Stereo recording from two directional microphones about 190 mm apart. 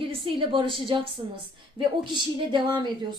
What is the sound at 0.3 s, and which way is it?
Speech, 25° right (ahead or behind).